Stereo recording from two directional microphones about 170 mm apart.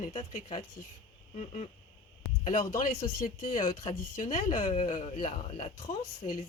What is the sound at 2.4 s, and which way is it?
Speech, 50° left (ahead or behind).